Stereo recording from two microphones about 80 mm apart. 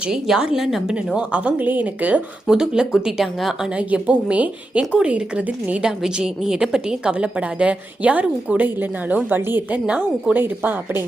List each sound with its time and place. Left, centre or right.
0.1 s a woman's voice: centre
3.8 s a woman's voice: centre